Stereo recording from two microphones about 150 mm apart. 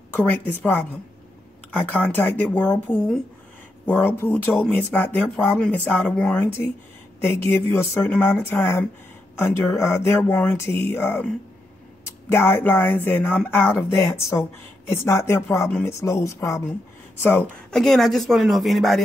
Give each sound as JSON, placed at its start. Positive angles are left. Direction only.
{"t": 0.1, "sound": "speech", "side_deg": 10}
{"t": 1.9, "sound": "speech", "side_deg": 10}